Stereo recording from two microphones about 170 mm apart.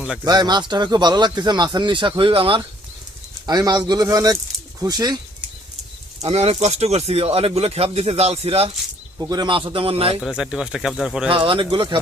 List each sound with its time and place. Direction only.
0.3 s speech: 25° right (ahead or behind)
6.2 s speech: 40° right (ahead or behind)
9.1 s speech: 20° right (ahead or behind)
10.2 s speech: centre (ahead or behind)
11.3 s speech: 30° right (ahead or behind)